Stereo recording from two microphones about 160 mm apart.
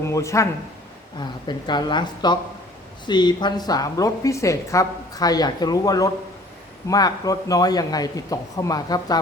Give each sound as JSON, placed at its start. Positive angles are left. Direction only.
{"t": 0.0, "sound": "speech", "side_deg": 20}